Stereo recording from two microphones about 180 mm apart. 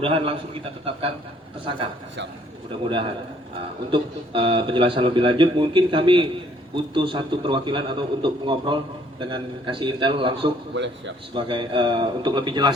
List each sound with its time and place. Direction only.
0.0 s a man's voice: 30° right (ahead or behind)
3.9 s a man's voice: 30° right (ahead or behind)
10.7 s a man's voice: 90° right
11.3 s a man's voice: 25° right (ahead or behind)